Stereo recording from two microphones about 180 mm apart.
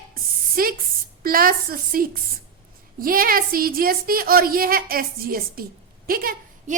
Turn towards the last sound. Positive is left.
turn(degrees=-55)  # may be behind; listen again after turning